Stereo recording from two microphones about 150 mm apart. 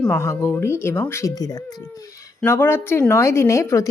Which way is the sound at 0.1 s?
20° left (ahead or behind).